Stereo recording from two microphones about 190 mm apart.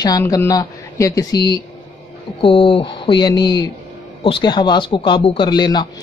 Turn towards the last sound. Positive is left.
turn(degrees=25)  # may be behind; listen again after turning